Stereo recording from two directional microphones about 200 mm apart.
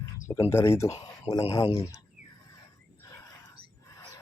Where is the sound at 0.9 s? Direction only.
25° left (ahead or behind).